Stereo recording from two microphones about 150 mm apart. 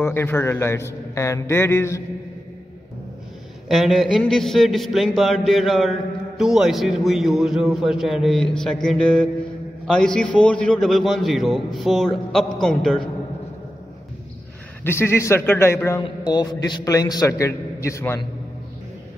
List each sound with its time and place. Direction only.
0.0 s a man's voice: 15° left (ahead or behind)
3.6 s a man's voice: centre (ahead or behind)
14.8 s a man's voice: 15° left (ahead or behind)
16.0 s a man's voice: 30° left (ahead or behind)